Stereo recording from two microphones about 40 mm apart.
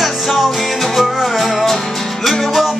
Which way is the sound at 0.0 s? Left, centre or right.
Centre.